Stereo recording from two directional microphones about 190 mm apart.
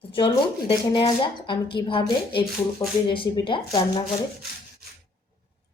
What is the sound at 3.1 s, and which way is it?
Speech, 25° left (ahead or behind).